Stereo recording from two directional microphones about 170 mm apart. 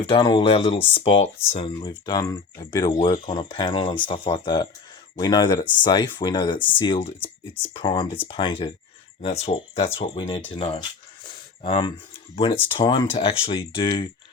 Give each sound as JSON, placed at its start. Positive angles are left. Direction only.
{"t": 0.0, "sound": "speech", "side_deg": 30}